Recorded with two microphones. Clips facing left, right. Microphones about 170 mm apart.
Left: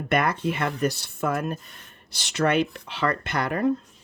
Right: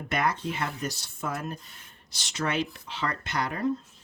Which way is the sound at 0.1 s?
60° left (ahead or behind).